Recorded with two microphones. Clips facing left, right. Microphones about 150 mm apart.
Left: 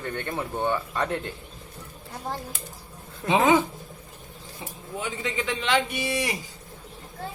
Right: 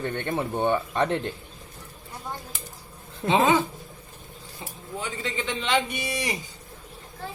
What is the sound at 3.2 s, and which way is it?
Speech, 15° left (ahead or behind).